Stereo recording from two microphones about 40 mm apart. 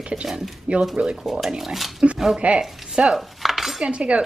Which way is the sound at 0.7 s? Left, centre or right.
Right.